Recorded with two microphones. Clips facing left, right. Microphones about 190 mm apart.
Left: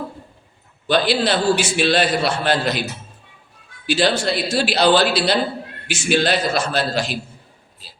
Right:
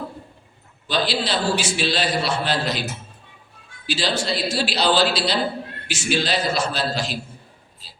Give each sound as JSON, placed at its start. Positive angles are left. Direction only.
{"t": 0.9, "sound": "a man's voice", "side_deg": 55}
{"t": 3.8, "sound": "a man's voice", "side_deg": 55}